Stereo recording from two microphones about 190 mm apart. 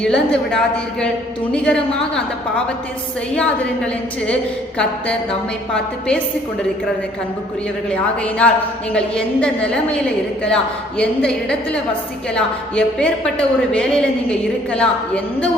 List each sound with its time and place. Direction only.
0.0 s a woman's voice: 5° left (ahead or behind)
3.3 s a woman's voice: 5° left (ahead or behind)
7.9 s a woman's voice: 5° left (ahead or behind)